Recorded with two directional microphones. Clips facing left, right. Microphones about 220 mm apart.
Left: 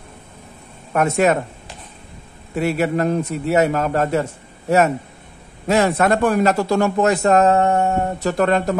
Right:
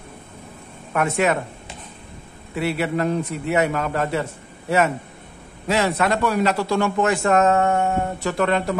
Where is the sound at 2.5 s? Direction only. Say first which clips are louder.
Left 4 dB; 45° left (ahead or behind).